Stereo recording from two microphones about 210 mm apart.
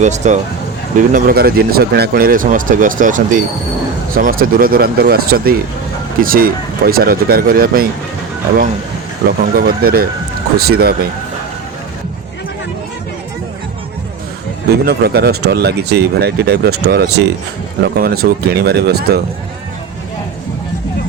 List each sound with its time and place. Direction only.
0.0 s speech: 35° right (ahead or behind)
9.4 s speech: 45° right (ahead or behind)
14.7 s speech: 50° right (ahead or behind)